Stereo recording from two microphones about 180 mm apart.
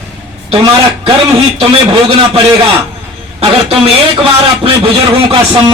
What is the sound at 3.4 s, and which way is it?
Speech, 30° right (ahead or behind).